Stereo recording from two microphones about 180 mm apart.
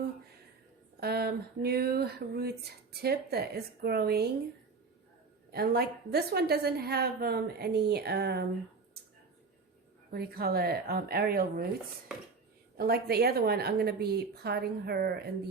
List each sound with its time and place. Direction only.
0.9 s speech: 60° right (ahead or behind)
5.5 s speech: 60° right (ahead or behind)
10.1 s speech: 60° right (ahead or behind)
12.7 s speech: 60° right (ahead or behind)